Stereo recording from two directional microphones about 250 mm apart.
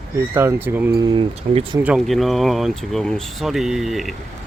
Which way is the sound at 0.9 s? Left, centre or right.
Centre.